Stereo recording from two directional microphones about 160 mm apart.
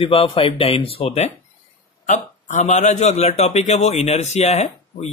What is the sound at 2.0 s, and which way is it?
Speech, 50° left (ahead or behind).